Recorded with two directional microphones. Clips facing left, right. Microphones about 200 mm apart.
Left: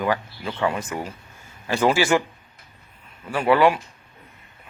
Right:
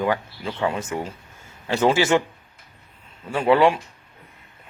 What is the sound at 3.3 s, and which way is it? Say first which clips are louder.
Speech: right 1 dB; 25° right (ahead or behind).